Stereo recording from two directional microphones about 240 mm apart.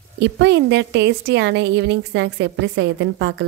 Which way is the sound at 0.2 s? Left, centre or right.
Right.